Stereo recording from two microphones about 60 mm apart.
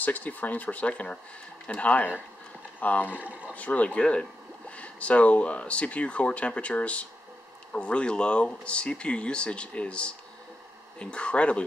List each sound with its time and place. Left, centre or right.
0.0 s speech: left
3.2 s speech: right
3.5 s speech: left